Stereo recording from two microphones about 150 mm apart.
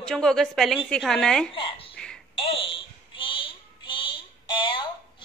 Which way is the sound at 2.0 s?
5° left (ahead or behind).